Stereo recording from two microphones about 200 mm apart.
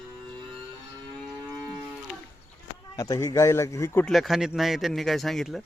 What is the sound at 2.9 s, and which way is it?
A man's voice, 15° left (ahead or behind).